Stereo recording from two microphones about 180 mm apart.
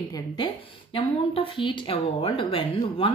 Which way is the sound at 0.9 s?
30° left (ahead or behind).